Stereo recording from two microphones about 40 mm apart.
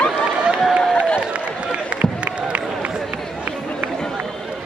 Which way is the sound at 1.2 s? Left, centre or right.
Right.